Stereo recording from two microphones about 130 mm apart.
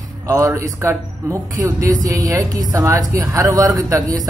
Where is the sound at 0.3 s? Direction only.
25° right (ahead or behind).